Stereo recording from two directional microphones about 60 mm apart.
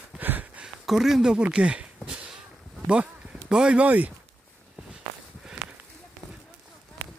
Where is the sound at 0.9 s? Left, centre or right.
Centre.